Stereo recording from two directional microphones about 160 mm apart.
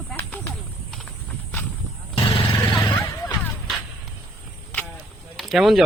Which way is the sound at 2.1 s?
35° left (ahead or behind).